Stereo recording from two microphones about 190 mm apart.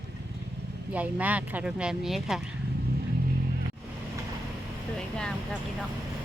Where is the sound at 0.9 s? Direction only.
10° right (ahead or behind).